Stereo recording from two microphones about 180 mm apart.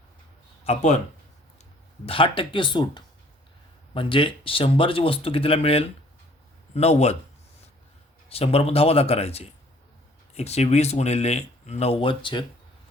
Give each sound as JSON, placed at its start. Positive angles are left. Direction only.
{"t": 0.6, "sound": "speech", "side_deg": 40}
{"t": 2.0, "sound": "speech", "side_deg": 30}
{"t": 8.3, "sound": "speech", "side_deg": 35}